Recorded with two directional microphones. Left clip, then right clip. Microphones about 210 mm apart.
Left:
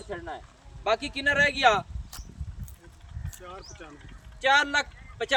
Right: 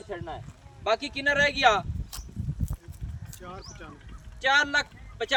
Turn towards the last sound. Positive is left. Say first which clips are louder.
# left 1 dB
turn(degrees=5)  # may be behind; listen again after turning